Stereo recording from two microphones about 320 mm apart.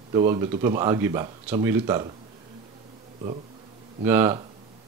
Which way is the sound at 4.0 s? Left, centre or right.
Centre.